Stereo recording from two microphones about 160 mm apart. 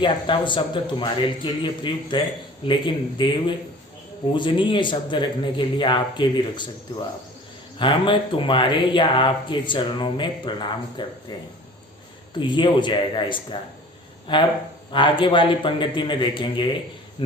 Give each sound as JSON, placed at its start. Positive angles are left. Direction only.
{"t": 0.0, "sound": "a man's voice", "side_deg": 30}
{"t": 7.8, "sound": "speech", "side_deg": 30}
{"t": 12.3, "sound": "a man's voice", "side_deg": 30}